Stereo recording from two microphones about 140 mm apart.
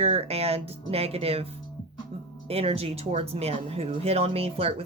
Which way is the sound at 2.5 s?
45° right (ahead or behind).